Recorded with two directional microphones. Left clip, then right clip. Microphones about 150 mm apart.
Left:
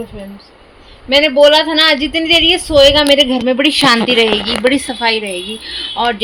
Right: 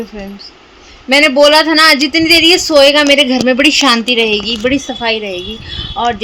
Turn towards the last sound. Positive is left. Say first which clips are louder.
# even
turn(degrees=0)  # may be behind; listen again after turning